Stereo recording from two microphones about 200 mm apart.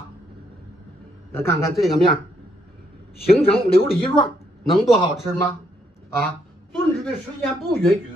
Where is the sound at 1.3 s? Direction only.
15° left (ahead or behind).